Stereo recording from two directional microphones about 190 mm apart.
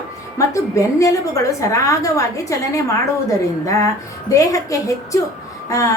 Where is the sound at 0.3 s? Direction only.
15° left (ahead or behind).